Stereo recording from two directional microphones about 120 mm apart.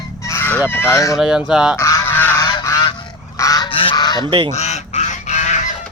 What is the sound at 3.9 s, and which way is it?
Goose, 35° left (ahead or behind).